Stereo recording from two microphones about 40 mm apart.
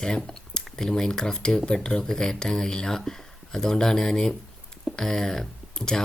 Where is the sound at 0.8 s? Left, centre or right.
Centre.